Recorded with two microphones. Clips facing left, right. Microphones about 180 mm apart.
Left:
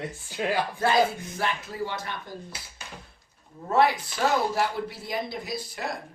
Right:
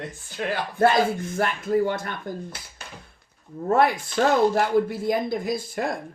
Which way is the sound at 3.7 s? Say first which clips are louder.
Right 2 dB; 50° right (ahead or behind).